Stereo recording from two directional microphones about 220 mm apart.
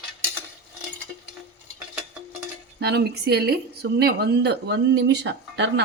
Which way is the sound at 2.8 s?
45° right (ahead or behind).